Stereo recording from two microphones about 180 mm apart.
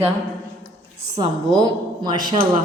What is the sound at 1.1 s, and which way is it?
A woman's voice, 25° right (ahead or behind).